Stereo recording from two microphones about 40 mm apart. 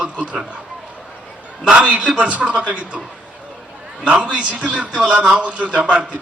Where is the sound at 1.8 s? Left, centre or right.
Right.